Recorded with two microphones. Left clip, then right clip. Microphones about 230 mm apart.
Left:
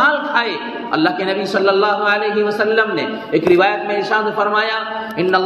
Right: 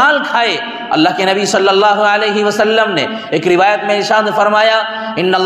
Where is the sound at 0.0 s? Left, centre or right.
Right.